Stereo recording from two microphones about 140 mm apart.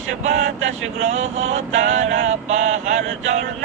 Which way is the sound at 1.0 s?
50° right (ahead or behind).